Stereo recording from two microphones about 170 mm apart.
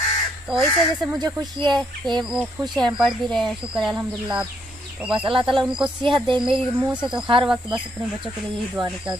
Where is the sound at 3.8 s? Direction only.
25° right (ahead or behind).